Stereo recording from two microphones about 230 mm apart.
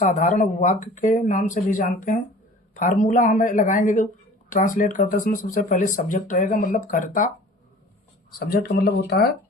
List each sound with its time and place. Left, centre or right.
0.0 s speech: left
8.3 s speech: left